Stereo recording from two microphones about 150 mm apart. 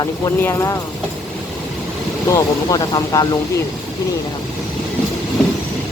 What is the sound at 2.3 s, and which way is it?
Speech, 25° left (ahead or behind).